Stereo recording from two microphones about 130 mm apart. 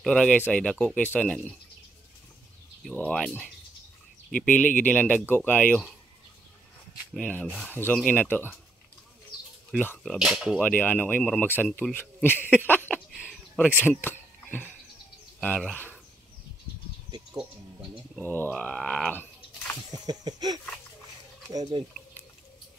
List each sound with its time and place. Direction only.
0.0 s speech: 5° left (ahead or behind)
2.8 s speech: 5° left (ahead or behind)
7.2 s speech: 10° left (ahead or behind)
10.0 s speech: 5° right (ahead or behind)
10.6 s speech: 10° left (ahead or behind)
13.3 s a sound: 5° right (ahead or behind)
14.0 s cricket: 15° left (ahead or behind)
17.3 s a sound: 5° right (ahead or behind)
18.2 s speech: 15° left (ahead or behind)
20.1 s a sound: 30° right (ahead or behind)